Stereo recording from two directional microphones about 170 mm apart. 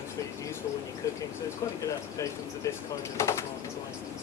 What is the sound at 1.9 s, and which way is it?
Speech, 20° left (ahead or behind).